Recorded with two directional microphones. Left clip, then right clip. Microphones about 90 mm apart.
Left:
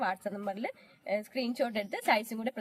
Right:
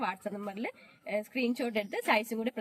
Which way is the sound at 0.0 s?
30° left (ahead or behind).